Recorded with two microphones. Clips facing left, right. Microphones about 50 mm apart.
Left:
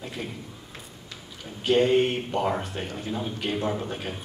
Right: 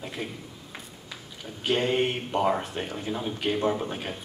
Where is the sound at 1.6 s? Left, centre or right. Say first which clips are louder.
Left 5 dB; centre.